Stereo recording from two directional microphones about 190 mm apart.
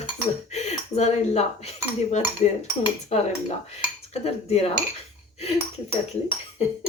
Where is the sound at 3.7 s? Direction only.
35° left (ahead or behind).